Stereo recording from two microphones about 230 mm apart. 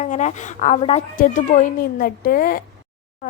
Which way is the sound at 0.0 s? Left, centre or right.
Left.